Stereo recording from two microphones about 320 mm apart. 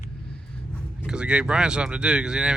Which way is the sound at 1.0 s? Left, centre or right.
Centre.